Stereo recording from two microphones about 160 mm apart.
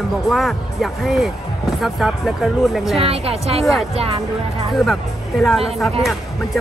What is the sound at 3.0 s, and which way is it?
Speech, 40° right (ahead or behind).